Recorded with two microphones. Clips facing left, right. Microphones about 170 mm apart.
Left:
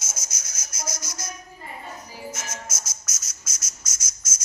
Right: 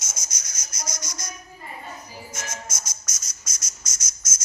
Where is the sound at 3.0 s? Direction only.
5° left (ahead or behind).